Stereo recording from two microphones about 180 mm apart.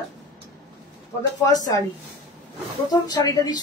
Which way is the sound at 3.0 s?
20° left (ahead or behind).